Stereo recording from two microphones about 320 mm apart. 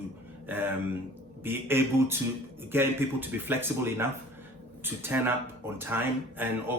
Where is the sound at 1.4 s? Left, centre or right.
Centre.